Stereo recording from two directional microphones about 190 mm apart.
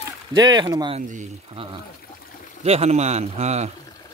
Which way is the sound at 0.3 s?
20° right (ahead or behind).